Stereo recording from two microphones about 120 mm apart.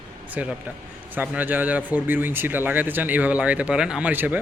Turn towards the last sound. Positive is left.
turn(degrees=-15)  # may be behind; listen again after turning